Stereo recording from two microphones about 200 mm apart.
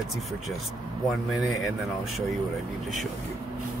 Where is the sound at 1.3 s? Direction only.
Centre (ahead or behind).